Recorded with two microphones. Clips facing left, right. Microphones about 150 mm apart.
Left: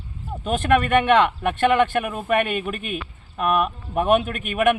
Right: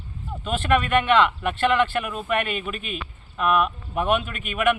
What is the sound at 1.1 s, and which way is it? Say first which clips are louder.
Speech: left 2 dB; 50° left (ahead or behind).